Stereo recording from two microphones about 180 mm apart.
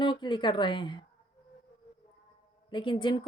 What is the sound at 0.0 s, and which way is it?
Speech, 25° left (ahead or behind).